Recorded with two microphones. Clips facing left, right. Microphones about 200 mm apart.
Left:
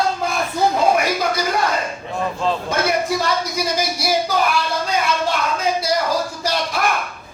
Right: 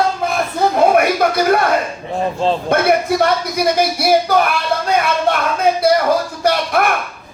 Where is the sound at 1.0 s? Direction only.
60° right (ahead or behind).